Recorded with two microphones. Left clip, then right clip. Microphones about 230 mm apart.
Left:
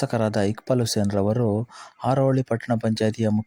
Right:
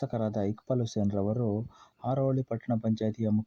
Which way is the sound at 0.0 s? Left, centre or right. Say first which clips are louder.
Left 9 dB; left.